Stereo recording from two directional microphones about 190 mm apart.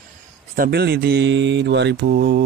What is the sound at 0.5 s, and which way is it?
Mantra, 55° right (ahead or behind).